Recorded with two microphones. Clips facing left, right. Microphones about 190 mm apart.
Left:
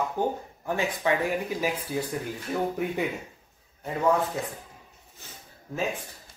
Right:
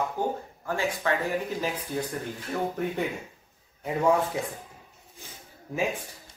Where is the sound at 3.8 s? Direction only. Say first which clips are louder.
Right 1 dB; 10° right (ahead or behind).